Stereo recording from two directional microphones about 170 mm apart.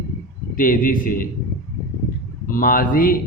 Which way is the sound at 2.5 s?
55° left (ahead or behind).